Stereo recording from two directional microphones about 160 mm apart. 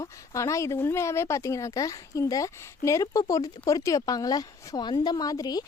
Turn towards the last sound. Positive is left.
turn(degrees=25)  # may be behind; listen again after turning